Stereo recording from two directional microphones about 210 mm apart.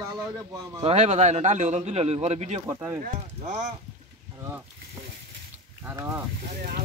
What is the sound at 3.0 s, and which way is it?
Speech, 35° right (ahead or behind).